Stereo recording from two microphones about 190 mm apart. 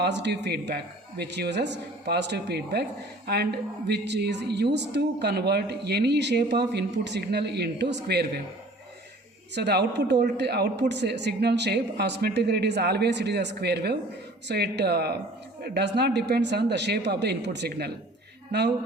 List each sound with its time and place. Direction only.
0.0 s a woman's voice: 60° right (ahead or behind)
9.6 s a woman's voice: 60° right (ahead or behind)